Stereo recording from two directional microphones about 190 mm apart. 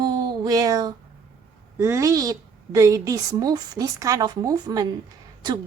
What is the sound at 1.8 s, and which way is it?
A woman's voice, 15° right (ahead or behind).